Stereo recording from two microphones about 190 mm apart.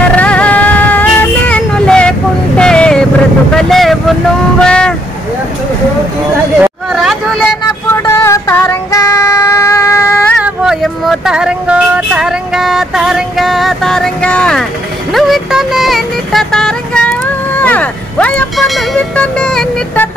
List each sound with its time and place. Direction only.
0.1 s child singing: 5° left (ahead or behind)
3.5 s vehicle: centre (ahead or behind)
6.6 s a sound: centre (ahead or behind)
8.0 s child singing: 15° left (ahead or behind)
10.4 s a sound: 5° right (ahead or behind)
15.1 s vehicle: centre (ahead or behind)